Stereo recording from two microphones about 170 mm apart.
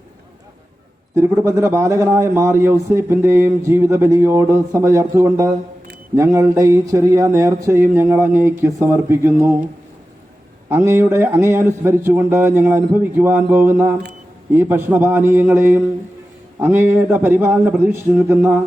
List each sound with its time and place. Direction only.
1.1 s a man's voice: 15° right (ahead or behind)
10.7 s a man's voice: 15° right (ahead or behind)